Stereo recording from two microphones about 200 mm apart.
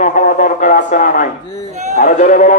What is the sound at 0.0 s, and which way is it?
A man's voice, 40° left (ahead or behind).